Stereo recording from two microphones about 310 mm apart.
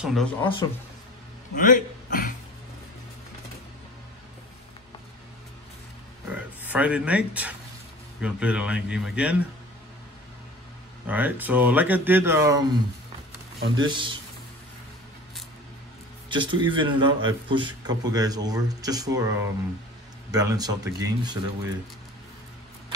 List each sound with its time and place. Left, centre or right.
0.0 s speech: centre
1.5 s a man's voice: left
6.3 s speech: centre
11.1 s speech: centre
13.8 s a man's voice: centre
16.3 s a man's voice: centre